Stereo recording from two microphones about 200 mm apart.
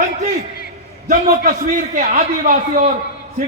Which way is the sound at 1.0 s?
45° right (ahead or behind).